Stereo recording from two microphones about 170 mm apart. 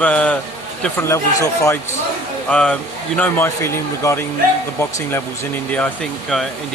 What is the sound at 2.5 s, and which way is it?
Speech, 5° left (ahead or behind).